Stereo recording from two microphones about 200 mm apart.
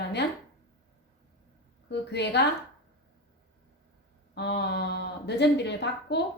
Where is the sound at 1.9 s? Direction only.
60° left (ahead or behind).